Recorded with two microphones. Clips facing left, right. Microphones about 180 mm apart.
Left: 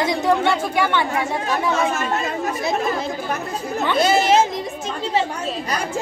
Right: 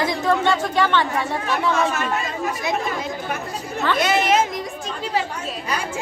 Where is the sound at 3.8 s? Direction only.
30° left (ahead or behind).